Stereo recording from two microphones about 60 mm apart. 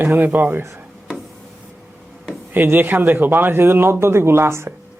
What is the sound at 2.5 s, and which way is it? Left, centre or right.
A man's voice, right.